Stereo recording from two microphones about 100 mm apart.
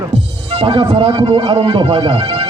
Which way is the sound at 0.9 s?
80° right.